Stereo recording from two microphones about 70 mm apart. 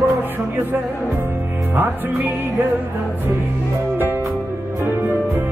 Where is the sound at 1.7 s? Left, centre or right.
Right.